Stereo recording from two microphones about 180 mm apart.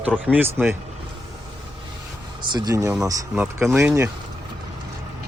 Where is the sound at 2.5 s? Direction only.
20° right (ahead or behind).